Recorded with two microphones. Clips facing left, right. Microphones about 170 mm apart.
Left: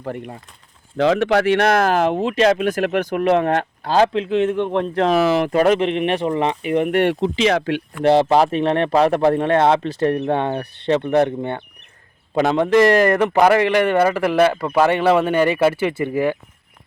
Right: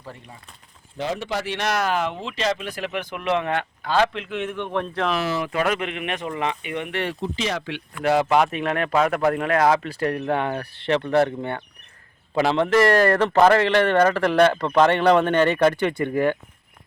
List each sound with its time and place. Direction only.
0.0 s speech: 55° left (ahead or behind)
0.9 s speech: 90° left; by 4.4 s 40° left (ahead or behind)
4.5 s speech: 25° left (ahead or behind)
5.2 s speech: 90° left
5.5 s speech: 40° left (ahead or behind); by 7.6 s 85° left
8.0 s speech: 35° left (ahead or behind); by 16.4 s 5° left (ahead or behind)